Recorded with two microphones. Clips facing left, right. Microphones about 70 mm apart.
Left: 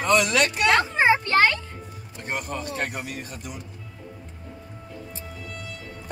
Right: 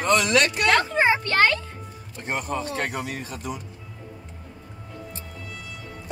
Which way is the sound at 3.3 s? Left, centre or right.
Right.